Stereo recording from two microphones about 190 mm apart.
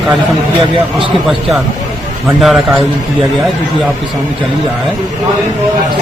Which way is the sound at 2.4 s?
Centre (ahead or behind).